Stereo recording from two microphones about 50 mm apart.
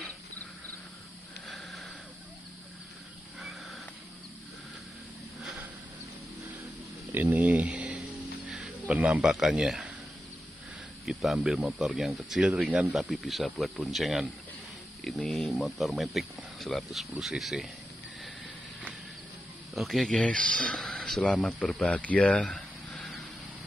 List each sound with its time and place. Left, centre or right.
1.5 s sniff: centre
7.1 s a sound: right
8.8 s a man's voice: right
9.3 s speech: centre
11.1 s speech: centre
12.4 s speech: centre
12.9 s speech: centre
15.3 s speech: centre
19.7 s a sound: centre
20.1 s speech: left
21.8 s speech: left
22.5 s a sound: centre